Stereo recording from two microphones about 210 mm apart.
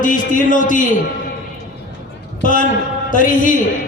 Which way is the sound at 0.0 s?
40° left (ahead or behind).